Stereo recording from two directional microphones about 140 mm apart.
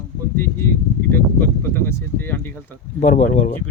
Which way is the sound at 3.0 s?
70° left (ahead or behind).